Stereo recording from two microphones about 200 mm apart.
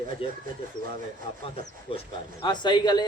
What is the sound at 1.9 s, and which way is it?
A man's voice, 30° left (ahead or behind).